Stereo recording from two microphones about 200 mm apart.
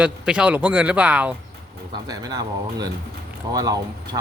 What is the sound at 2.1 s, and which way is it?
Speech, 20° right (ahead or behind).